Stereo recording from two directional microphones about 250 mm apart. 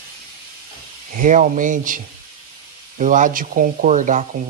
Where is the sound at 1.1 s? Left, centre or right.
Right.